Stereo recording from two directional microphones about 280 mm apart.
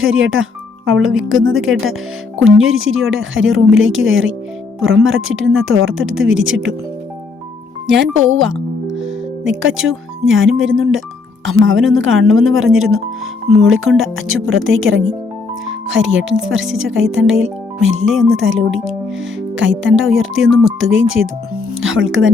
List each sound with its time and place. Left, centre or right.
0.0 s speech: right
7.9 s speech: right
20.1 s speech: right